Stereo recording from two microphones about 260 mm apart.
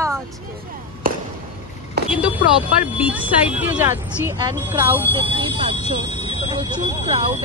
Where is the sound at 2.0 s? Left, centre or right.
Right.